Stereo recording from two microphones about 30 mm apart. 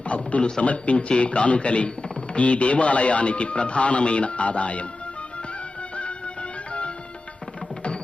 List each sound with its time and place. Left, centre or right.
0.1 s a man's voice: left